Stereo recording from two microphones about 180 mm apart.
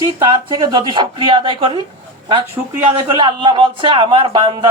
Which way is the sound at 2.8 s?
25° right (ahead or behind).